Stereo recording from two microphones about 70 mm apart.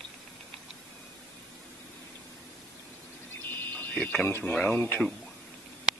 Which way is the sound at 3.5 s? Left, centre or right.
Left.